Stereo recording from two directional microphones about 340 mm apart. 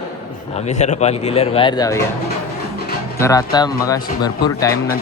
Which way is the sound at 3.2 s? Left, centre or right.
Centre.